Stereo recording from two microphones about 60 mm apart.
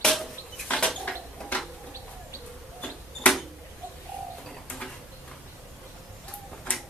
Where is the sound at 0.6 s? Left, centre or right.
Centre.